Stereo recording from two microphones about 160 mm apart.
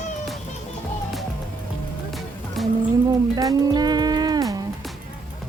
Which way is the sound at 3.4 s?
25° right (ahead or behind).